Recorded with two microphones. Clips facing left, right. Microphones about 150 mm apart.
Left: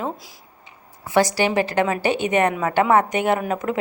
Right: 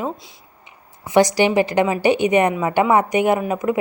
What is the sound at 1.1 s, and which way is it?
Speech, 15° right (ahead or behind).